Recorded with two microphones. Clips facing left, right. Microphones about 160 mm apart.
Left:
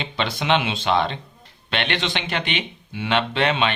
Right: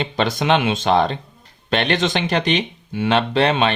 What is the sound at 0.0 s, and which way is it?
Speech, 45° right (ahead or behind).